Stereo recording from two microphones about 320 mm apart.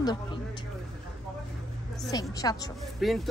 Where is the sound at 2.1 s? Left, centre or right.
Centre.